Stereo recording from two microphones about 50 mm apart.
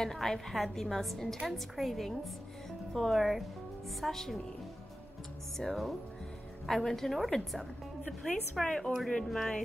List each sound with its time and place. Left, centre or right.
0.0 s a woman's voice: centre
5.6 s a woman's voice: centre
8.6 s a woman's voice: centre
9.2 s a woman's voice: centre